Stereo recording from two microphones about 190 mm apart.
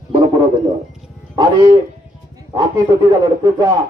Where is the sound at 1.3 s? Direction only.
20° right (ahead or behind).